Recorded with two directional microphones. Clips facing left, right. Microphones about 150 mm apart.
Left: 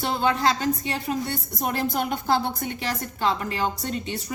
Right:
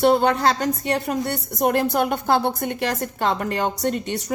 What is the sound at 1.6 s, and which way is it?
A woman's voice, 60° right (ahead or behind).